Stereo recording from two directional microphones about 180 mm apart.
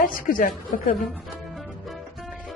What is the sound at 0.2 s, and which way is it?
Speech, 50° left (ahead or behind).